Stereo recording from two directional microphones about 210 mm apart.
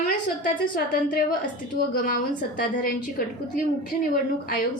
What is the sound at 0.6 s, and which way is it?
A woman's voice, 40° left (ahead or behind).